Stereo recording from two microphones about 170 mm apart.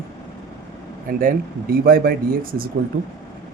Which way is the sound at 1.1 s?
55° right (ahead or behind).